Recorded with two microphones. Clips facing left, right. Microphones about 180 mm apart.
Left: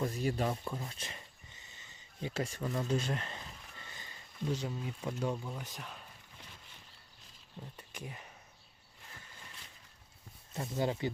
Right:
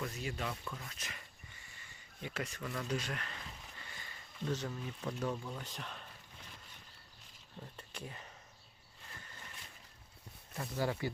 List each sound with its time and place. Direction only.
0.0 s speech: 35° left (ahead or behind)
3.8 s a sound: 20° left (ahead or behind)
4.4 s speech: 10° left (ahead or behind)
7.8 s speech: 10° left (ahead or behind)
10.5 s speech: 20° left (ahead or behind)